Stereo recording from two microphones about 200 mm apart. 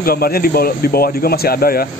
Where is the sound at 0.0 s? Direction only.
50° left (ahead or behind).